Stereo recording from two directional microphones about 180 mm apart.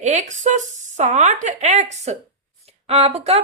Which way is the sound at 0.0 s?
40° right (ahead or behind).